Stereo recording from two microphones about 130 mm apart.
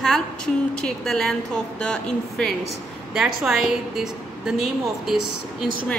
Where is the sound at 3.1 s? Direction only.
5° right (ahead or behind).